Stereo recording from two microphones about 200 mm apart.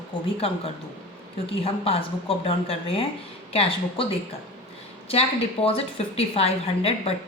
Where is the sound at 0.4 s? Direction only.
30° left (ahead or behind).